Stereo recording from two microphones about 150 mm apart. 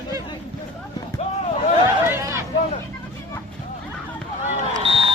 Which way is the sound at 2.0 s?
20° right (ahead or behind).